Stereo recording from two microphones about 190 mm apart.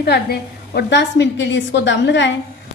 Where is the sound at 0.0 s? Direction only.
60° left (ahead or behind).